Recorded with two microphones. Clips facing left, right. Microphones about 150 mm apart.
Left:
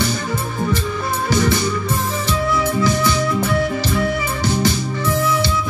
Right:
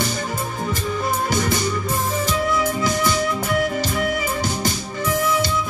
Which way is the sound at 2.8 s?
45° right (ahead or behind).